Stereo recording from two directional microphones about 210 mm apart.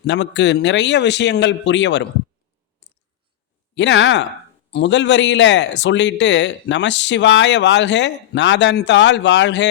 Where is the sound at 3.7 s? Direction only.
60° left (ahead or behind).